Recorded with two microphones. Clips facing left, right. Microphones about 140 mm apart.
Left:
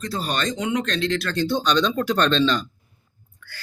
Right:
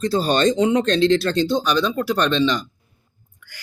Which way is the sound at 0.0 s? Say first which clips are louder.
Right 8 dB; 30° right (ahead or behind).